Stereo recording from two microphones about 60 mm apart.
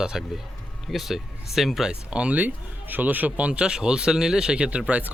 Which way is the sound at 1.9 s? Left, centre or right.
Centre.